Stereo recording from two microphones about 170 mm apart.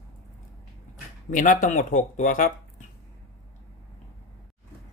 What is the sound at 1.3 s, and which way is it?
Speech, 50° left (ahead or behind).